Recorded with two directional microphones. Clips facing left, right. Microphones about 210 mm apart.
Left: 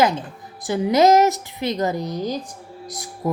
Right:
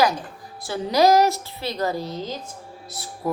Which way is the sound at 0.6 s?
15° left (ahead or behind).